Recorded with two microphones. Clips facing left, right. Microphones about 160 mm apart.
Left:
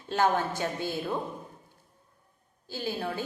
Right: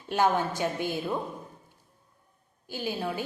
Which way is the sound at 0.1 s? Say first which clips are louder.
Right 1 dB; 15° right (ahead or behind).